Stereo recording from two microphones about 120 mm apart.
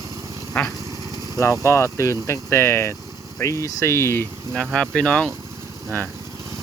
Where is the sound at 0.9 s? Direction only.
30° right (ahead or behind).